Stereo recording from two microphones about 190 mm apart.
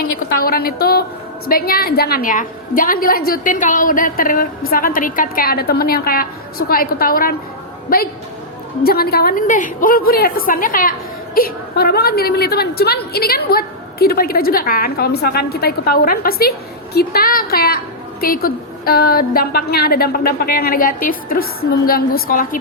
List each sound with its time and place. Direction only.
0.0 s a woman's voice: 50° left (ahead or behind)
8.8 s a woman's voice: 55° left (ahead or behind)